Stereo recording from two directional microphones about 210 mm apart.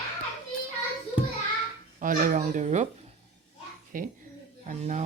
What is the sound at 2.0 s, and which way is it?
Speech, 40° right (ahead or behind).